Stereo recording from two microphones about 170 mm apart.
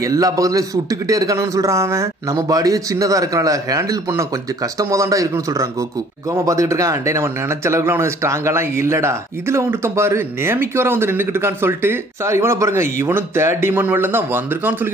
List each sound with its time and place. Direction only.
0.0 s a man's voice: 20° right (ahead or behind)